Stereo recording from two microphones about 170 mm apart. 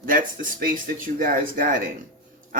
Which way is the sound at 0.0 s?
55° right (ahead or behind).